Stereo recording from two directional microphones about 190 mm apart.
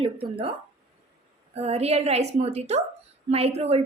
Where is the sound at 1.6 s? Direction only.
35° right (ahead or behind).